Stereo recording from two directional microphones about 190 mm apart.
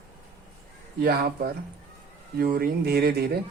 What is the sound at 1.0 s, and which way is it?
A man's voice, 55° right (ahead or behind).